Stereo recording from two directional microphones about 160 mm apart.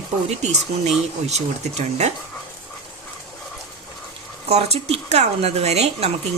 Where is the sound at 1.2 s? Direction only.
45° right (ahead or behind).